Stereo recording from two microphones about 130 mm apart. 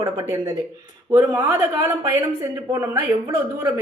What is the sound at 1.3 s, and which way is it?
Speech, 20° right (ahead or behind).